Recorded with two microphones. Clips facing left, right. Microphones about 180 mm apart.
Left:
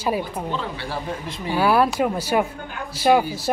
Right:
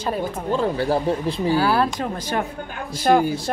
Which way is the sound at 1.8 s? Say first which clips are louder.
Left 3 dB; 10° left (ahead or behind).